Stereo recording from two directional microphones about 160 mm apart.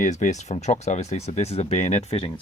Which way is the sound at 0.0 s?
50° left (ahead or behind).